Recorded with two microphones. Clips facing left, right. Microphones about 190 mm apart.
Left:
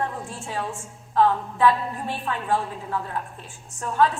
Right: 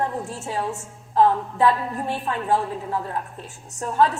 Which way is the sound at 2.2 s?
40° right (ahead or behind).